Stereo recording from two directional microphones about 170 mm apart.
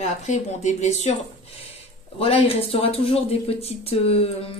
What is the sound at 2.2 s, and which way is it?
Speech, 35° left (ahead or behind).